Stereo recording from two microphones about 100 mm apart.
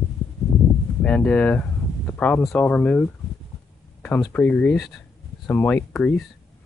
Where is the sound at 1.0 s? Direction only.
15° left (ahead or behind).